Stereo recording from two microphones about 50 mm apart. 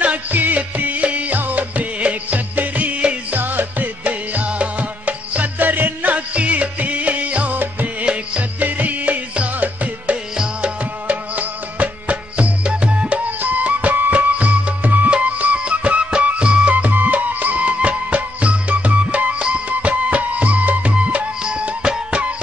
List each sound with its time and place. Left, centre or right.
0.0 s music: right
10.3 s music: centre
11.1 s music: right
16.7 s music: right; by 22.2 s centre